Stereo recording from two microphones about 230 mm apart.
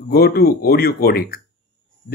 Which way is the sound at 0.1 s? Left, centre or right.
Left.